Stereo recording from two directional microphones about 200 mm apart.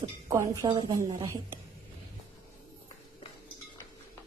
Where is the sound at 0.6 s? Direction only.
20° right (ahead or behind).